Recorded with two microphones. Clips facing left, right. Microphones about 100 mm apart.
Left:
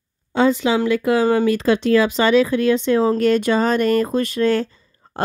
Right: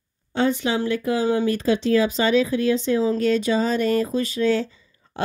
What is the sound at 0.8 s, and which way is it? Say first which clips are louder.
Speech: left 5 dB; 85° left.